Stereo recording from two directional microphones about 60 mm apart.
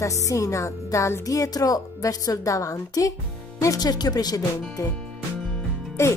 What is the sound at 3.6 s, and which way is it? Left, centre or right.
Speech, left.